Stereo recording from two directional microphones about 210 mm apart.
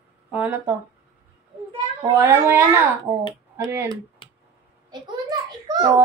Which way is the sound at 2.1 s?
10° right (ahead or behind).